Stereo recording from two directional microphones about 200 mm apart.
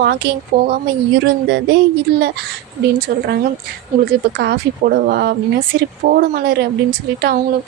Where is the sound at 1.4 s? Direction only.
65° right (ahead or behind).